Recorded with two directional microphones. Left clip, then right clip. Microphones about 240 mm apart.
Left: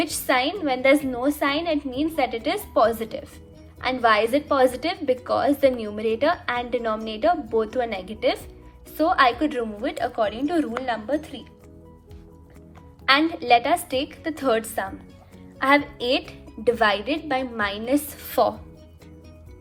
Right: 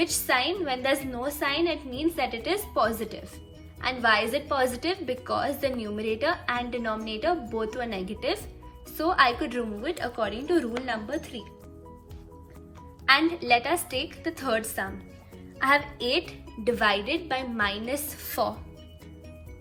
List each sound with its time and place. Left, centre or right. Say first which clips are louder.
0.0 s a woman's voice: left 3 dB; left
13.1 s a woman's voice: left 3 dB; left